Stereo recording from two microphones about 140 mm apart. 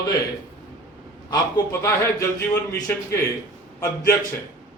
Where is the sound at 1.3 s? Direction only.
20° left (ahead or behind).